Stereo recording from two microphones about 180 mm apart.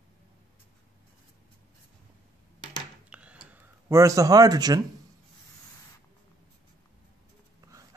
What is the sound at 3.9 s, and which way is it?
Speech, 15° right (ahead or behind).